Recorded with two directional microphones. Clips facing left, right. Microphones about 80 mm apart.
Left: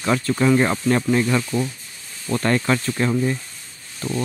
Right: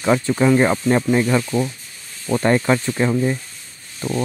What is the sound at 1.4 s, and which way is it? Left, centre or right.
Speech, right.